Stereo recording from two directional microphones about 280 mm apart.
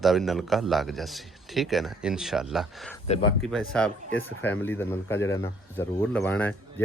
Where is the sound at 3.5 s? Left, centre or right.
Centre.